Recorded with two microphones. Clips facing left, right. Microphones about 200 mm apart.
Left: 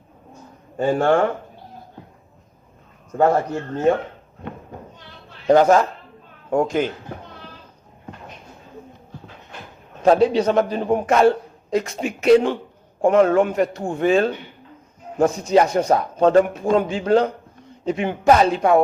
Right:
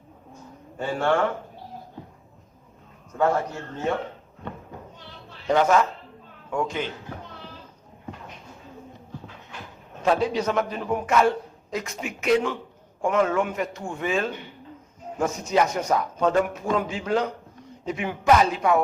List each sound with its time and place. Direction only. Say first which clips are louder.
0.8 s speech: left 6 dB; 45° left (ahead or behind)
3.2 s a man's voice: left 5 dB; 40° left (ahead or behind)
5.5 s a man's voice: left 6 dB; 35° left (ahead or behind)
10.0 s a man's voice: left 7 dB; 30° left (ahead or behind)